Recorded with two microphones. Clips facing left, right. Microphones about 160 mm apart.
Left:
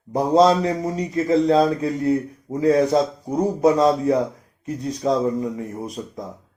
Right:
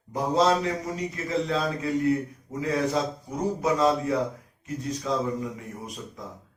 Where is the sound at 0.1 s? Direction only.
35° left (ahead or behind).